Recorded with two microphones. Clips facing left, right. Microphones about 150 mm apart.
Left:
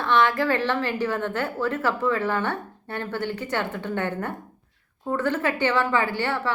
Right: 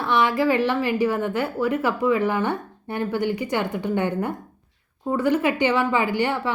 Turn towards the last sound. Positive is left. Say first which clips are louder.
# right 3 dB
turn(degrees=-15)  # may be behind; listen again after turning